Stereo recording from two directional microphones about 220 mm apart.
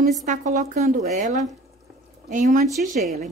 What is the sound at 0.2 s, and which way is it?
Speech, 35° right (ahead or behind).